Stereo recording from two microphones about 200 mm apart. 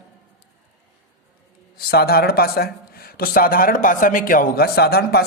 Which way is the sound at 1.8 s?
50° left (ahead or behind).